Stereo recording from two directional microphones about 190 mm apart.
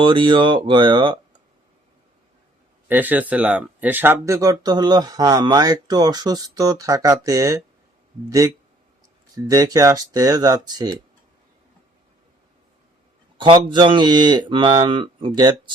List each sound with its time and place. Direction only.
0.0 s speech: 25° right (ahead or behind)
2.8 s speech: 10° right (ahead or behind)
9.3 s speech: 20° right (ahead or behind)
13.4 s speech: 25° right (ahead or behind)